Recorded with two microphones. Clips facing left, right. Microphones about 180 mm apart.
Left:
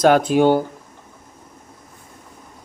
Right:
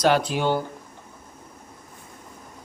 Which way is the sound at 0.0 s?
50° left (ahead or behind).